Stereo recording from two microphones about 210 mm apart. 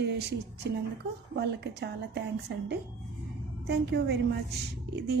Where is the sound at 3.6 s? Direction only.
55° right (ahead or behind).